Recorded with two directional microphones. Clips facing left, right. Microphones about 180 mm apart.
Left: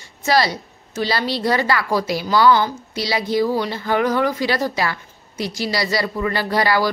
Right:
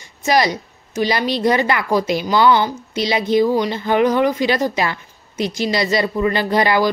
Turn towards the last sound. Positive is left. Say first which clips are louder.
# right 3 dB
turn(degrees=-20)  # may be behind; listen again after turning